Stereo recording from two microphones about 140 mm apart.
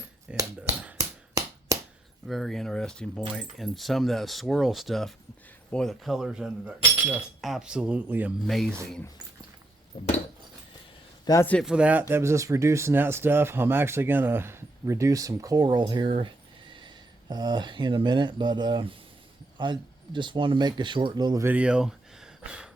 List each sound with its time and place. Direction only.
0.3 s speech: 5° right (ahead or behind)
0.9 s a sound: 25° right (ahead or behind)
2.2 s speech: centre (ahead or behind)
8.4 s speech: centre (ahead or behind)
11.3 s a man's voice: 30° left (ahead or behind)
11.6 s speech: 5° right (ahead or behind); by 21.4 s 30° right (ahead or behind)
21.4 s a sound: 10° right (ahead or behind)